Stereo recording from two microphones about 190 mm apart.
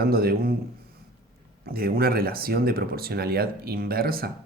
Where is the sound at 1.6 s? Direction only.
50° right (ahead or behind).